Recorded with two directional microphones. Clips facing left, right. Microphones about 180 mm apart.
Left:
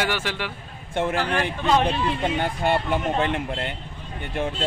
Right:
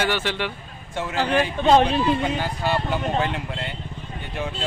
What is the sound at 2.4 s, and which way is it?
Speech, 55° left (ahead or behind).